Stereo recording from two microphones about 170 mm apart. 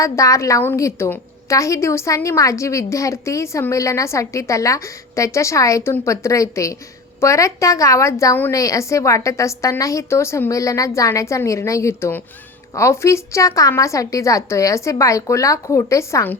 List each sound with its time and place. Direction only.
0.0 s a woman's voice: 20° left (ahead or behind)